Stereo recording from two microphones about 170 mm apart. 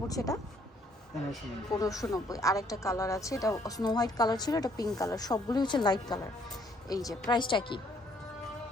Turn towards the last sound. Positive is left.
turn(degrees=30)  # may be behind; listen again after turning